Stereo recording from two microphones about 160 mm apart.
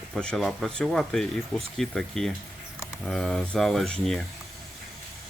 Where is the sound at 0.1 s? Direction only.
5° left (ahead or behind).